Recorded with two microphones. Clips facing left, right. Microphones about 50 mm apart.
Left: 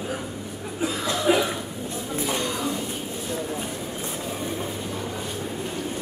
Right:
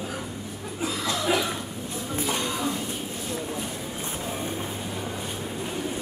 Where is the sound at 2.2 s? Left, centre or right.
Centre.